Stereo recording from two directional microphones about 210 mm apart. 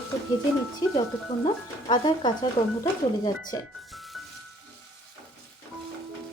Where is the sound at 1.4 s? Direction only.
25° left (ahead or behind).